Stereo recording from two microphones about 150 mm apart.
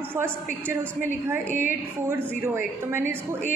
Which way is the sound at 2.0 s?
15° right (ahead or behind).